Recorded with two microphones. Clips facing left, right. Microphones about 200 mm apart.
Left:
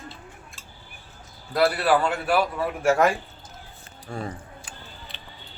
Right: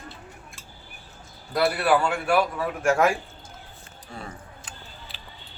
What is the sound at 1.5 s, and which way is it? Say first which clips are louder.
A man's voice: left 1 dB; centre (ahead or behind).